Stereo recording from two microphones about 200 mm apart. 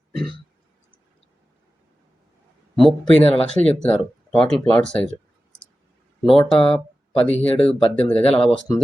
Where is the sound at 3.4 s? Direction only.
5° left (ahead or behind).